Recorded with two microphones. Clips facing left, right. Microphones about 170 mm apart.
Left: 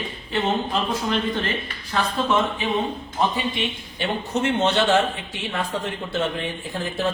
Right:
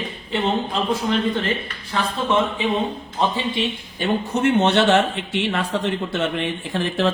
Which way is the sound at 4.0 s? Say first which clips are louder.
Right 4 dB; 60° right (ahead or behind).